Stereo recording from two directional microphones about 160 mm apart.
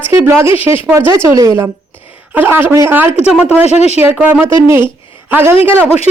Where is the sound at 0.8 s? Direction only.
15° right (ahead or behind).